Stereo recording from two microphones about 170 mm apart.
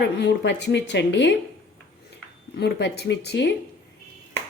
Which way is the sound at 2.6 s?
80° left.